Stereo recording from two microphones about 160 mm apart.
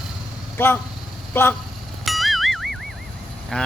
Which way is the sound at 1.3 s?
15° left (ahead or behind).